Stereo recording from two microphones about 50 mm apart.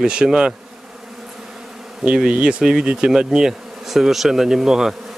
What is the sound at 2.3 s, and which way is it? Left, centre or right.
Speech, right.